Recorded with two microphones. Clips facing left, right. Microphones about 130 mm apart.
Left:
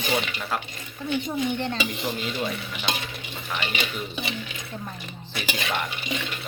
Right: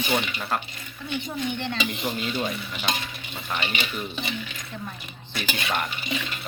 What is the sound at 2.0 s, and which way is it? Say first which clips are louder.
Speech: right 1 dB; 5° right (ahead or behind).